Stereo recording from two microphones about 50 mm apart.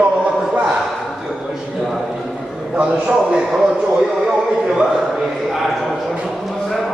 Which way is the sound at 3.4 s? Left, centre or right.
Centre.